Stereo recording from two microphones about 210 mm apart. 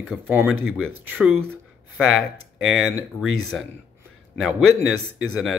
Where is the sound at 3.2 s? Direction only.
80° right.